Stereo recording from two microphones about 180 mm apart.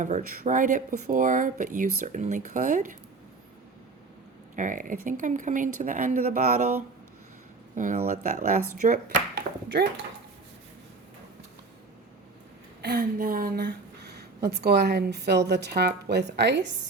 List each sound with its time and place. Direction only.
0.0 s speech: 45° right (ahead or behind)
4.5 s speech: 45° right (ahead or behind)
7.8 s speech: 40° right (ahead or behind)
12.8 s speech: 55° right (ahead or behind); by 16.7 s 75° right (ahead or behind)